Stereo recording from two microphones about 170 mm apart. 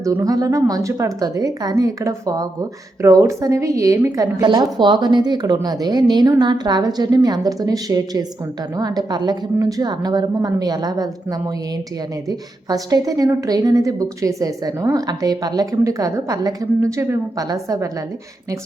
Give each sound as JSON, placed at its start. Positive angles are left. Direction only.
{"t": 0.0, "sound": "a woman's voice", "side_deg": -20}